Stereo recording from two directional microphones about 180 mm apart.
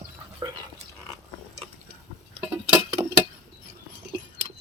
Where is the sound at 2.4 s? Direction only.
10° right (ahead or behind).